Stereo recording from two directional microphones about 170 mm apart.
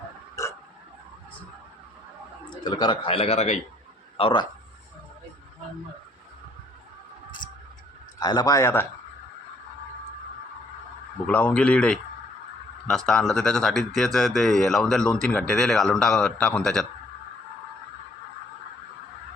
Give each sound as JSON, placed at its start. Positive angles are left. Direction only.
{"t": 0.4, "sound": "hiccup", "side_deg": 20}
{"t": 2.5, "sound": "a man's voice", "side_deg": 25}
{"t": 4.2, "sound": "speech", "side_deg": 30}
{"t": 8.2, "sound": "speech", "side_deg": 25}
{"t": 11.3, "sound": "a man's voice", "side_deg": 5}